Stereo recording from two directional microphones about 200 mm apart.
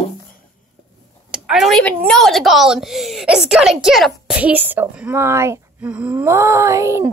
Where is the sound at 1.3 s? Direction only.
Centre (ahead or behind).